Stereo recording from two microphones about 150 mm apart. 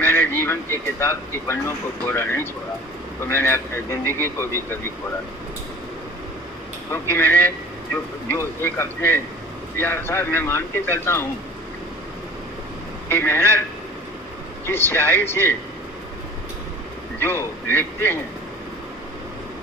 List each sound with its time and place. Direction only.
0.0 s speech: 15° left (ahead or behind)
6.9 s speech: 15° left (ahead or behind)
13.1 s speech: 15° left (ahead or behind)
14.7 s speech: 15° left (ahead or behind)
17.2 s speech: 15° left (ahead or behind)